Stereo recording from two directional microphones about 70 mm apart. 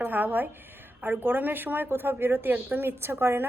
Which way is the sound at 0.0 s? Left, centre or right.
Right.